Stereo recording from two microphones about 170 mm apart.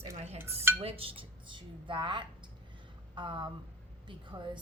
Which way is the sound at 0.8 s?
35° right (ahead or behind).